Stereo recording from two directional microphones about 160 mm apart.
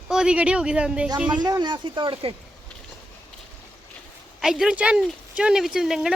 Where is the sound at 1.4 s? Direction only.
25° right (ahead or behind).